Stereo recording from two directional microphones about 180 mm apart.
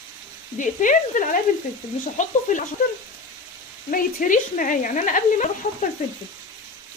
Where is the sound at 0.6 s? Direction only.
45° left (ahead or behind).